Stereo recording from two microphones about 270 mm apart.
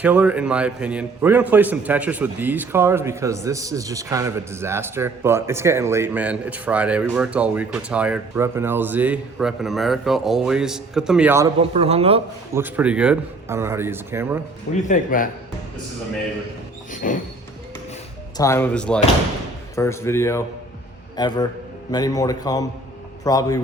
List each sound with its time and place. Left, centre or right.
0.0 s a man's voice: centre
11.7 s a man's voice: right
12.5 s speech: centre
14.7 s speech: left
16.9 s a sound: left
18.3 s speech: centre